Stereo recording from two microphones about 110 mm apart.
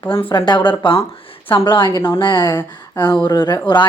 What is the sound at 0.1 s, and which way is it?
Speech, 50° left (ahead or behind).